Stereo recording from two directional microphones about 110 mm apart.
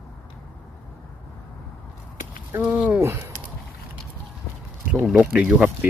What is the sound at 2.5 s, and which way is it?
Speech, 15° right (ahead or behind).